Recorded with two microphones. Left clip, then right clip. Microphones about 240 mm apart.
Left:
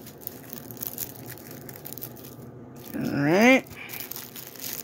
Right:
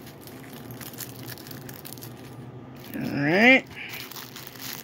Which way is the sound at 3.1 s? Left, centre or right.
Centre.